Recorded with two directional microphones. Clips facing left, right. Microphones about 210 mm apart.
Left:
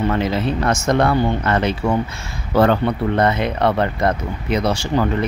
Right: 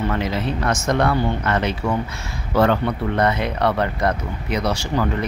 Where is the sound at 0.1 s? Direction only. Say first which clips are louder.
Left 3 dB; 30° left (ahead or behind).